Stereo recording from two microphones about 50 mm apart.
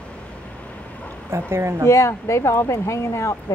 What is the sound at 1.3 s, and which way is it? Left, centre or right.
Speech, right.